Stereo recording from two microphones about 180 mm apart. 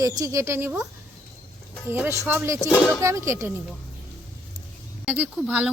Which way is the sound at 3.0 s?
15° right (ahead or behind).